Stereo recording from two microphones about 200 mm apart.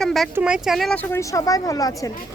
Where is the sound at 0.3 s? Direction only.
5° right (ahead or behind).